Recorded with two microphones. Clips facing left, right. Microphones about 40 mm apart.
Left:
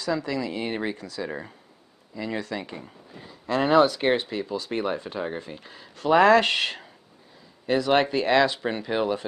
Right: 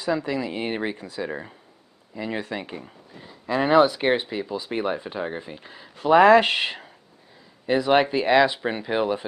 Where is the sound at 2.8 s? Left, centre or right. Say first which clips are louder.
Even; centre.